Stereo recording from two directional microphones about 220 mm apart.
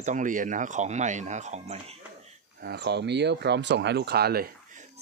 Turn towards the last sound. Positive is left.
turn(degrees=-45)  # may be behind; listen again after turning